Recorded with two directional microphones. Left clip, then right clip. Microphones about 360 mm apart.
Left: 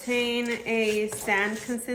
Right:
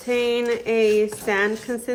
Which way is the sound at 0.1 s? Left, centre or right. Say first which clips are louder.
Right 6 dB; centre.